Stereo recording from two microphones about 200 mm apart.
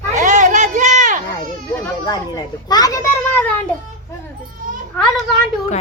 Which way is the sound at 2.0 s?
20° left (ahead or behind).